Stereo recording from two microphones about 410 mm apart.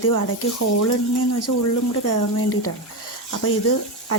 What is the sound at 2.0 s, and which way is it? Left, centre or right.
Speech, left.